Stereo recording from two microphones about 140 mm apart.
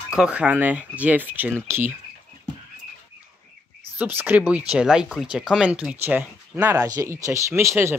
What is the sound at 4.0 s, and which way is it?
Speech, 15° right (ahead or behind).